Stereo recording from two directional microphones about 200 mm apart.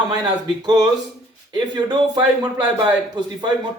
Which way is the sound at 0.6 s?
20° right (ahead or behind).